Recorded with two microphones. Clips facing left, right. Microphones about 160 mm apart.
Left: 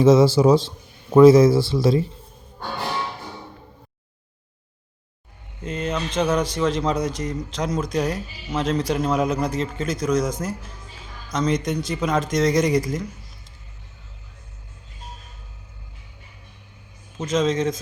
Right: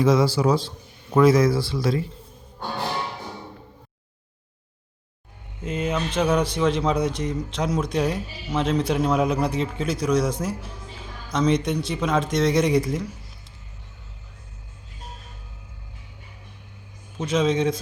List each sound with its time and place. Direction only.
0.0 s speech: 25° left (ahead or behind)
5.6 s speech: 5° right (ahead or behind)
17.2 s speech: 5° right (ahead or behind)